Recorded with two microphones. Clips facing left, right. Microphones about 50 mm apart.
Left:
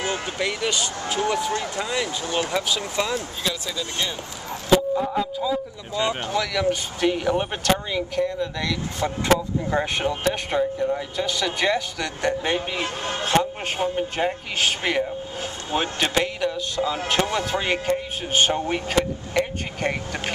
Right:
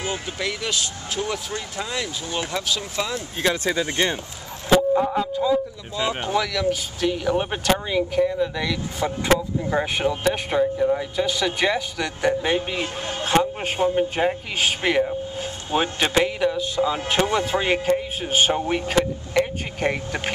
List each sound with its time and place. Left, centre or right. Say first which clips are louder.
0.1 s speech: left 2 dB; centre
3.4 s speech: right 6 dB; right
4.9 s speech: right 3 dB; centre
6.7 s speech: left 1 dB; centre
7.3 s speech: right 1 dB; centre
12.8 s speech: left 1 dB; left
13.2 s speech: right 2 dB; centre